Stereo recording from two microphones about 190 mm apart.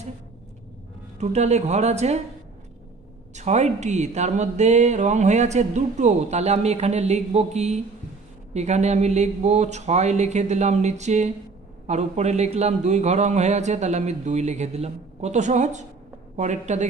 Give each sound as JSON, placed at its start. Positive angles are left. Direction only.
{"t": 1.2, "sound": "speech", "side_deg": -35}
{"t": 3.3, "sound": "speech", "side_deg": -35}